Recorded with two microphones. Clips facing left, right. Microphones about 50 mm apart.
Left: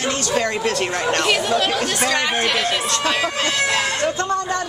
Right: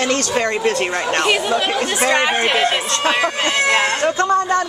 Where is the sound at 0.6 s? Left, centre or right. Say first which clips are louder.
Right 2 dB; centre.